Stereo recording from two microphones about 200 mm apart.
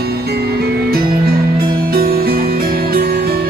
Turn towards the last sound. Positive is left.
turn(degrees=-50)  # may be behind; listen again after turning